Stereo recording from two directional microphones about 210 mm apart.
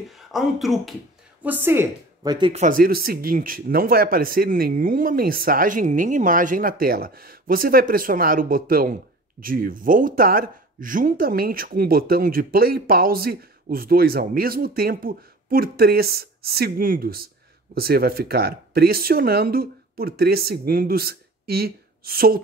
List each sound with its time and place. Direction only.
0.3 s speech: centre (ahead or behind); by 2.6 s 20° right (ahead or behind)
2.6 s speech: 40° right (ahead or behind)